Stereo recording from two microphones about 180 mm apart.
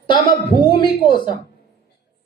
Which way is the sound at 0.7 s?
25° left (ahead or behind).